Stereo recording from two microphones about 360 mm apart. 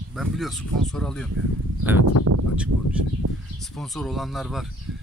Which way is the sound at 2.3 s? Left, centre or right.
Right.